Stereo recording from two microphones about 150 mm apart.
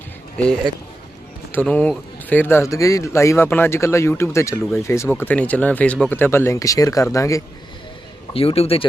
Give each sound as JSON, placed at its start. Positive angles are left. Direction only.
{"t": 1.5, "sound": "speech", "side_deg": 10}
{"t": 8.3, "sound": "a man's voice", "side_deg": 40}